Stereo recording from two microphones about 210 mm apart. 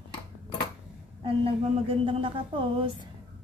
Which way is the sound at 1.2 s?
25° right (ahead or behind).